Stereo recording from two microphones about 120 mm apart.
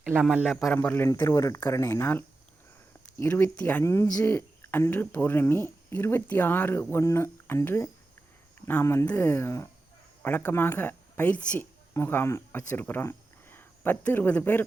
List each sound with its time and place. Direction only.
0.1 s a man's voice: 10° right (ahead or behind)
0.5 s speech: 5° left (ahead or behind)
0.8 s speech: 20° left (ahead or behind)
3.8 s speech: 20° left (ahead or behind)